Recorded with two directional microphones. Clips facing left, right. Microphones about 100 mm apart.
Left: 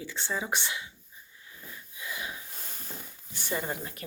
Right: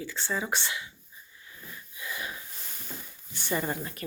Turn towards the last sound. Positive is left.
turn(degrees=15)  # may be behind; listen again after turning